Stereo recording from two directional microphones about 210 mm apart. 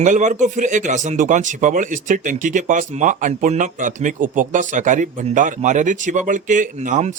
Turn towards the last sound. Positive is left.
turn(degrees=-35)  # may be behind; listen again after turning